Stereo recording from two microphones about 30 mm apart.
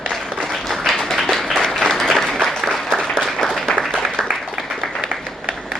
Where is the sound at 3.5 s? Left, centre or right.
Centre.